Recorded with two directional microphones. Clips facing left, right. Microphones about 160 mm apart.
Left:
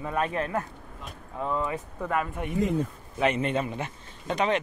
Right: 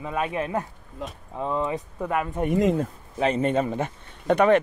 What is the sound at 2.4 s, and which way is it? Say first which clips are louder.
Speech: right 7 dB; 80° right.